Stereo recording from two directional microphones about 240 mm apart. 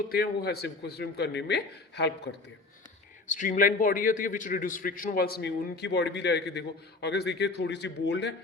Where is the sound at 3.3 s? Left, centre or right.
Left.